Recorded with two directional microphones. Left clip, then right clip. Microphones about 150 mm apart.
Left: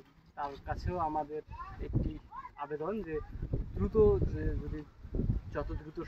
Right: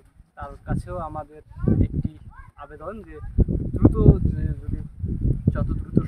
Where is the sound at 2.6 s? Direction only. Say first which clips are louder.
Right 1 dB; 20° right (ahead or behind).